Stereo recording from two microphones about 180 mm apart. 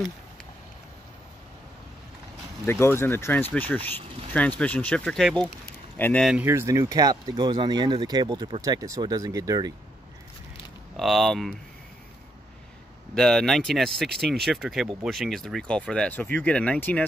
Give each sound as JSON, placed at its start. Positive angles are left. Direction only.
{"t": 2.6, "sound": "speech", "side_deg": 15}
{"t": 6.2, "sound": "speech", "side_deg": -10}
{"t": 11.0, "sound": "speech", "side_deg": 0}
{"t": 13.1, "sound": "speech", "side_deg": 5}